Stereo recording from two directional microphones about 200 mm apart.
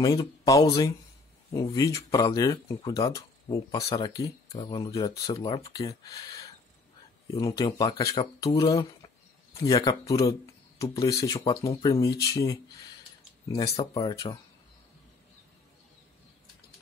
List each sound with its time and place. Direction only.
0.0 s speech: 20° left (ahead or behind)
13.7 s speech: 30° left (ahead or behind)
14.1 s speech: 15° left (ahead or behind)